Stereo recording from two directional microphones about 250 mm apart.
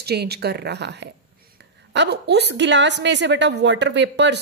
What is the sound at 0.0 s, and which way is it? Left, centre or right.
A woman's voice, right.